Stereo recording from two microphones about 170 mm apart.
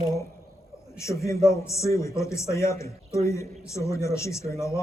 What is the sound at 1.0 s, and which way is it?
A man's voice, 15° left (ahead or behind).